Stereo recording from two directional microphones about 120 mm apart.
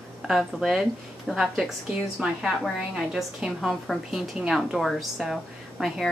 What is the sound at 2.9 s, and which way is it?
A woman's voice, 5° right (ahead or behind).